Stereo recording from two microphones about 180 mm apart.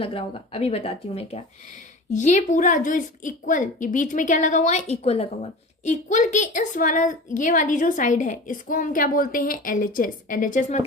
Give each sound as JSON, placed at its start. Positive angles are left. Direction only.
{"t": 0.0, "sound": "a woman's voice", "side_deg": 30}